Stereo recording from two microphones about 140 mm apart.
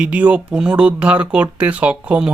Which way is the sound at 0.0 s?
10° right (ahead or behind).